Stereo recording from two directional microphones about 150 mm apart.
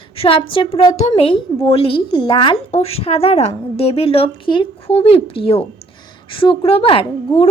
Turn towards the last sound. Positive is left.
turn(degrees=40)  # may be behind; listen again after turning